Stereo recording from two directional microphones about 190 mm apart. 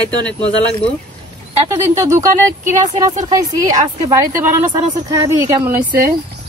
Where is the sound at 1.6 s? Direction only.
15° right (ahead or behind).